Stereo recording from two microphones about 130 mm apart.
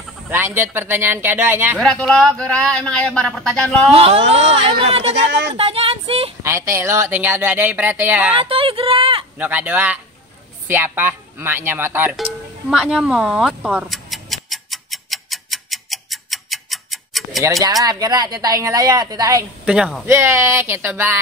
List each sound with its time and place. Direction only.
0.3 s speech: 20° right (ahead or behind)
1.8 s a man's voice: 5° left (ahead or behind)
3.9 s speech: 50° right (ahead or behind)
6.4 s speech: 20° right (ahead or behind)
8.4 s speech: 45° right (ahead or behind)
9.4 s speech: 10° right (ahead or behind)
12.2 s music: 5° right (ahead or behind)
17.4 s speech: 25° right (ahead or behind)
19.6 s speech: 5° right (ahead or behind)
20.1 s speech: 20° right (ahead or behind)